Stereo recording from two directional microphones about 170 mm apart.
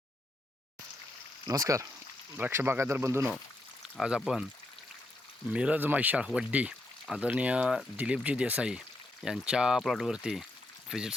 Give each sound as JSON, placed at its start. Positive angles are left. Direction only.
{"t": 1.5, "sound": "speech", "side_deg": -20}
{"t": 3.9, "sound": "speech", "side_deg": -5}
{"t": 5.5, "sound": "speech", "side_deg": -5}